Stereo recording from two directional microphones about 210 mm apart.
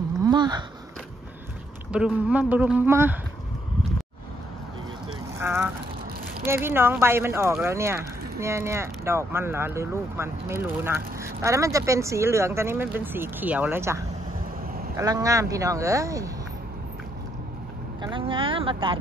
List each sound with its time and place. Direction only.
0.2 s a sound: 20° right (ahead or behind)
1.9 s speech: 5° right (ahead or behind)
5.4 s speech: 10° right (ahead or behind)
14.6 s a sound: 45° right (ahead or behind)
15.0 s speech: 15° right (ahead or behind)
18.0 s speech: 25° right (ahead or behind)